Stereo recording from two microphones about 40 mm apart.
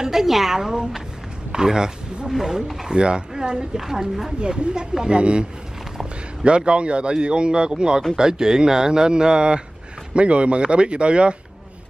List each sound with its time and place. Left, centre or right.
0.0 s a woman's voice: centre
3.0 s a woman's voice: right; by 4.3 s centre
4.4 s speech: right